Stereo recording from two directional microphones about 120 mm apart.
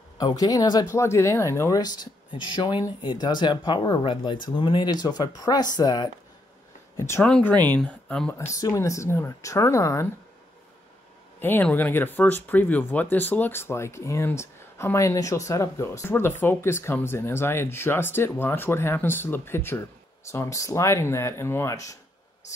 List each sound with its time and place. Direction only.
0.2 s speech: 30° left (ahead or behind)
1.8 s speech: 35° left (ahead or behind)
7.0 s speech: 25° left (ahead or behind)
7.2 s speech: 5° left (ahead or behind)
8.4 s speech: 25° left (ahead or behind)
11.3 s speech: 15° left (ahead or behind)